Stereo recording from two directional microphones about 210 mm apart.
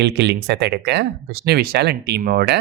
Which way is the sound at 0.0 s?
55° right (ahead or behind).